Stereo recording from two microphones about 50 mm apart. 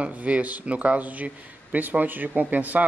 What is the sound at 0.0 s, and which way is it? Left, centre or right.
A man's voice, right.